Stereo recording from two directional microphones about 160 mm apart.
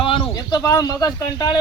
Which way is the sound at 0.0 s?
35° left (ahead or behind).